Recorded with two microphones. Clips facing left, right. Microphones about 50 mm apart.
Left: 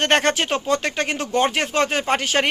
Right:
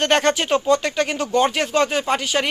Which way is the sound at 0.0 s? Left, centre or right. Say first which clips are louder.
Right 1 dB; left.